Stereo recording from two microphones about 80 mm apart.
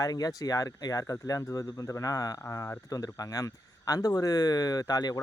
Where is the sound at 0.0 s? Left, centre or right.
Left.